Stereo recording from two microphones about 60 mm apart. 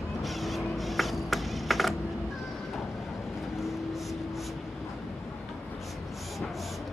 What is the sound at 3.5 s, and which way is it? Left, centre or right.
Vehicle, centre.